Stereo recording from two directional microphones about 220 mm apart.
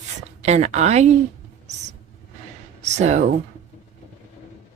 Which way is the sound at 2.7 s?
30° right (ahead or behind).